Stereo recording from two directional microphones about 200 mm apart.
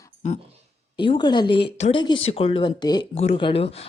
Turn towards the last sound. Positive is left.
turn(degrees=30)  # may be behind; listen again after turning